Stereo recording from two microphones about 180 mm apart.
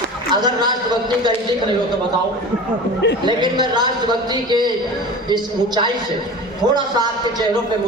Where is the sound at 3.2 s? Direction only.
25° right (ahead or behind).